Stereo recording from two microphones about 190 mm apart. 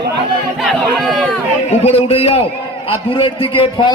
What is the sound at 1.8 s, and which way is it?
A man's voice, 30° left (ahead or behind).